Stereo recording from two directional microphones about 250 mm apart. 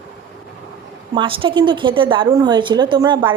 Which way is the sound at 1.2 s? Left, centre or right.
Centre.